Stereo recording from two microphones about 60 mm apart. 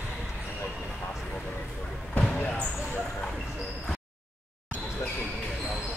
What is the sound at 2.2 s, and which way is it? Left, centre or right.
Basketball bounce, left.